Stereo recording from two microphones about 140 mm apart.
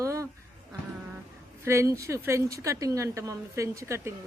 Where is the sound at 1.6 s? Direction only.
20° right (ahead or behind).